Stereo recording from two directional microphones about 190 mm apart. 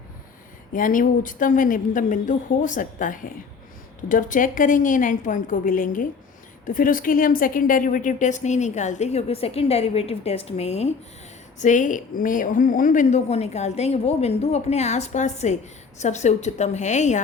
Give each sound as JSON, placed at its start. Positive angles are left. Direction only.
{"t": 0.7, "sound": "a woman's voice", "side_deg": 45}